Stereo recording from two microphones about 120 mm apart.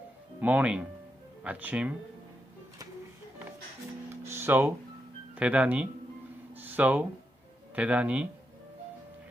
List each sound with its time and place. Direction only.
0.3 s speech: 10° right (ahead or behind)
4.2 s music: 20° right (ahead or behind)
5.3 s speech: 10° right (ahead or behind)
6.5 s music: 15° right (ahead or behind)
7.8 s speech: 10° right (ahead or behind)